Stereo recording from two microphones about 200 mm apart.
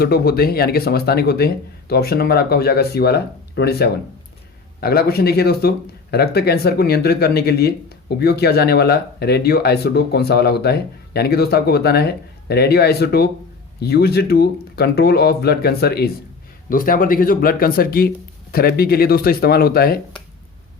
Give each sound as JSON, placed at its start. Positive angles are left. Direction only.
{"t": 0.0, "sound": "speech", "side_deg": 50}